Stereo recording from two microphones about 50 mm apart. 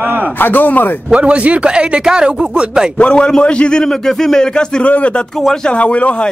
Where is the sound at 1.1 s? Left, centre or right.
Right.